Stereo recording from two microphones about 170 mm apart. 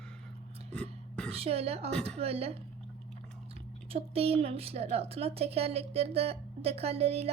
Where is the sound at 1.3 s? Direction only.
35° right (ahead or behind).